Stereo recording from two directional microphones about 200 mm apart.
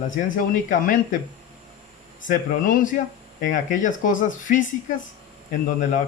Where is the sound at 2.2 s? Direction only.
40° left (ahead or behind).